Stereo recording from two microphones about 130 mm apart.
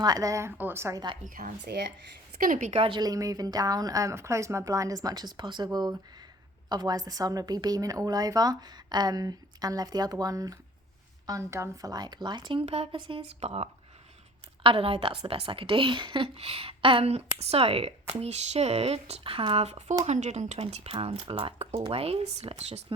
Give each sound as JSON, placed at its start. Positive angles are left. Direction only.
{"t": 0.0, "sound": "a woman's voice", "side_deg": -30}
{"t": 1.2, "sound": "speech", "side_deg": -90}
{"t": 2.4, "sound": "a woman's voice", "side_deg": -80}
{"t": 2.8, "sound": "a woman's voice", "side_deg": -35}
{"t": 12.6, "sound": "a woman's voice", "side_deg": -50}
{"t": 20.6, "sound": "a woman's voice", "side_deg": -55}